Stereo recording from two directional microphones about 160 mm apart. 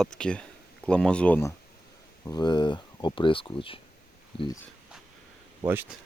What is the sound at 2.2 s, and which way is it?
Speech, 25° left (ahead or behind).